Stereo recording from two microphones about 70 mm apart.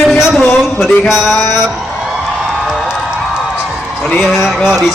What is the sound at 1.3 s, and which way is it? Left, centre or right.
Music, left.